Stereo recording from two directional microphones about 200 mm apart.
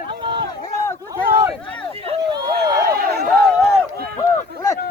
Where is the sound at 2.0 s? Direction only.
25° right (ahead or behind).